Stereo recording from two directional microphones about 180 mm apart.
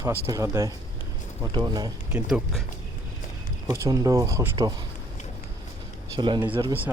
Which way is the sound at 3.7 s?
20° right (ahead or behind).